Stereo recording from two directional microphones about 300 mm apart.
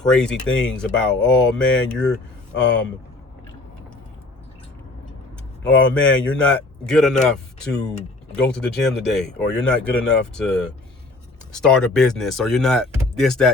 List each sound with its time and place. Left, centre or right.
0.0 s a man's voice: centre
5.6 s a man's voice: centre